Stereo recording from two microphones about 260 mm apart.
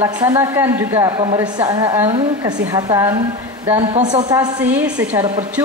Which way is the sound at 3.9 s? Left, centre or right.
Right.